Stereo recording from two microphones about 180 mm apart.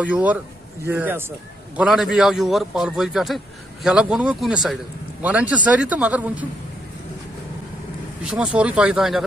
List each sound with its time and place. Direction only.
0.0 s a man's voice: 10° right (ahead or behind)
8.2 s a man's voice: 5° right (ahead or behind)